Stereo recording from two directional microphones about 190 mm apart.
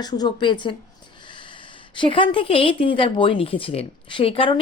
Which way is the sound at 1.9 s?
25° left (ahead or behind).